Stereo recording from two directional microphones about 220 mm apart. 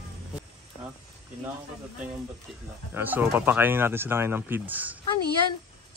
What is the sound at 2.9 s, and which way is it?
Speech, 10° right (ahead or behind).